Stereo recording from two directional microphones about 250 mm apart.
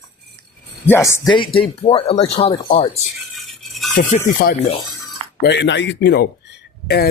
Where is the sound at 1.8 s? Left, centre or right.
Left.